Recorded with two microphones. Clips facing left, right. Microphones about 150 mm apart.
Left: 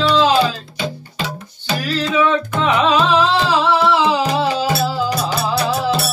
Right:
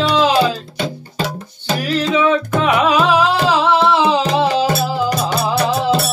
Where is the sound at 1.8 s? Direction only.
15° right (ahead or behind).